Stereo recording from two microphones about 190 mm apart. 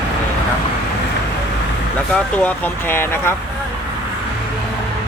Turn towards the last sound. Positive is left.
turn(degrees=10)  # may be behind; listen again after turning